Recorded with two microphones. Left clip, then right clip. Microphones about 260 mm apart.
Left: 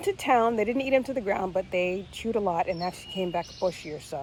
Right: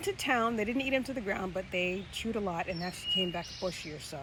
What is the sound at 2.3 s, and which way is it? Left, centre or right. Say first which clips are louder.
Speech: left 10 dB; left.